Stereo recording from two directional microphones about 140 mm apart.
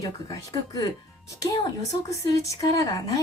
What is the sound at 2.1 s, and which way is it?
A woman's voice, 20° left (ahead or behind).